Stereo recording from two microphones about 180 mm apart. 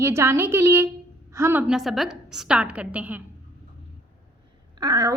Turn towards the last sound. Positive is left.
turn(degrees=-20)  # may be behind; listen again after turning